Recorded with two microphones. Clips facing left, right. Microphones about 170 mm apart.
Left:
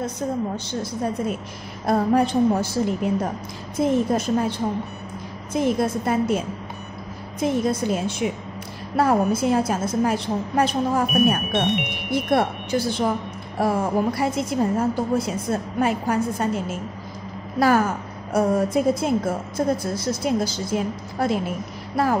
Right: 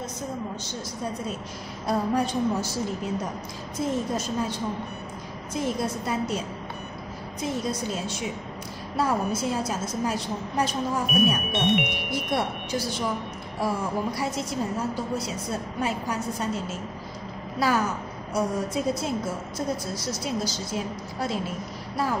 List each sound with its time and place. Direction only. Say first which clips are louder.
1.9 s a woman's voice: left 6 dB; 55° left (ahead or behind)